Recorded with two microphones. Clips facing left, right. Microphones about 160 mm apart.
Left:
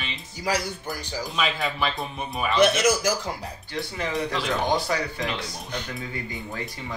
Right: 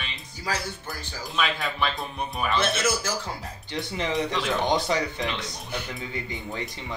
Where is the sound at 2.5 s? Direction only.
15° left (ahead or behind).